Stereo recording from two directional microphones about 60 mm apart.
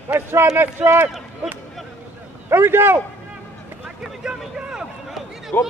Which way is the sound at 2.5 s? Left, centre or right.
Right.